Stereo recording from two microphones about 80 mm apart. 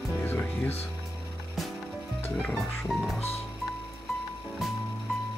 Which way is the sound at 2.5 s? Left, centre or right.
Centre.